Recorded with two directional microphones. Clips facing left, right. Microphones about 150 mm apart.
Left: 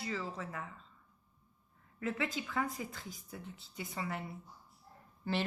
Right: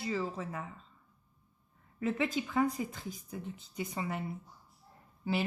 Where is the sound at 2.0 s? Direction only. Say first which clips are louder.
Right 5 dB; 25° right (ahead or behind).